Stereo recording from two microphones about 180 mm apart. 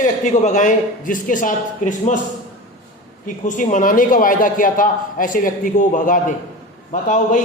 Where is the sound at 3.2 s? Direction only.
45° left (ahead or behind).